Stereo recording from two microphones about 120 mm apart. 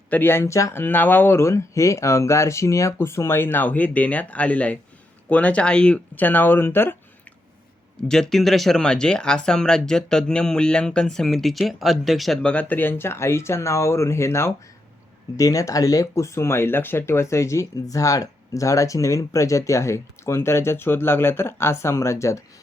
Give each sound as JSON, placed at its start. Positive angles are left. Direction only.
{"t": 0.1, "sound": "speech", "side_deg": 15}
{"t": 8.0, "sound": "speech", "side_deg": 5}